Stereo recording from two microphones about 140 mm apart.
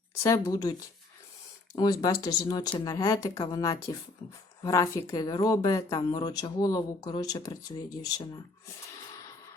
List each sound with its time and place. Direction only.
0.1 s speech: 25° left (ahead or behind)